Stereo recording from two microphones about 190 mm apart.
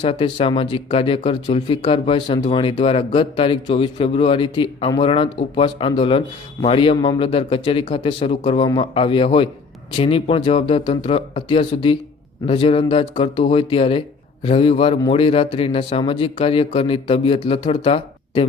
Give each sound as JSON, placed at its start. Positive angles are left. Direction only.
{"t": 0.0, "sound": "speech", "side_deg": 30}